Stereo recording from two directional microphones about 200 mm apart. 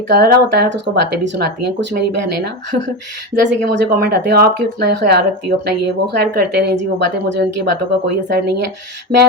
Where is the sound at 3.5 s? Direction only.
55° right (ahead or behind).